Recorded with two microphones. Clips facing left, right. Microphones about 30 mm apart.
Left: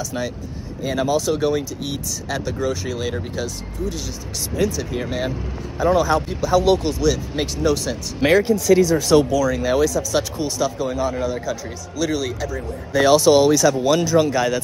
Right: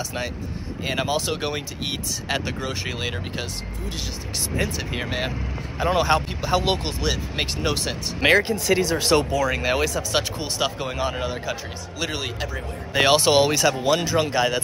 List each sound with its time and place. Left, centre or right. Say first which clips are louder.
0.8 s speech: left 4 dB; right
4.6 s speech: left 6 dB; right